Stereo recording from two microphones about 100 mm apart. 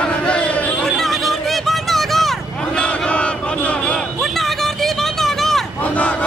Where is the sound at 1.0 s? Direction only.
Centre (ahead or behind).